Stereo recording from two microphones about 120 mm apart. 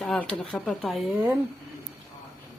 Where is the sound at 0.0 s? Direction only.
5° left (ahead or behind).